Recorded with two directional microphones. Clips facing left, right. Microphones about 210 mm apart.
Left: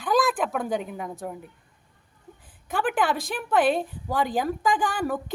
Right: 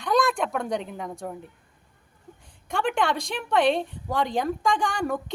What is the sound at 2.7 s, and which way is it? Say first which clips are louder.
A woman's voice: even; 5° left (ahead or behind).